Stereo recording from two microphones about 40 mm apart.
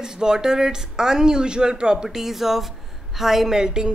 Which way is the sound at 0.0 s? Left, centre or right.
Centre.